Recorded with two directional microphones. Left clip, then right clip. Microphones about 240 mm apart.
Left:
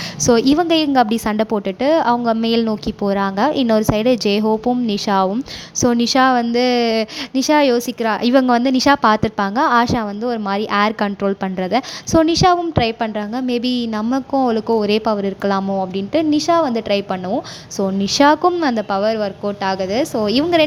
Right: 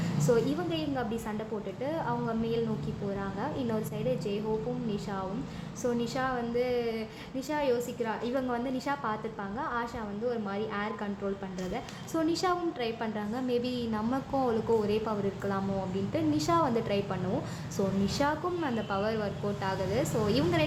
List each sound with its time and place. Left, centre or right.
0.3 s a woman's voice: left